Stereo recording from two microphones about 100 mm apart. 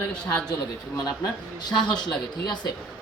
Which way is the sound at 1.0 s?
40° left (ahead or behind).